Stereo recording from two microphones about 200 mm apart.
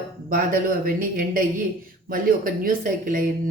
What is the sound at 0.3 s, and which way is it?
Speech, 45° right (ahead or behind).